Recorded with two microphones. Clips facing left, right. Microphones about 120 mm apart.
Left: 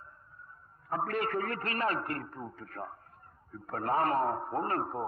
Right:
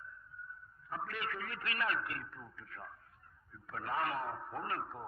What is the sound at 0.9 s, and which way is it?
A man's voice, 50° left (ahead or behind).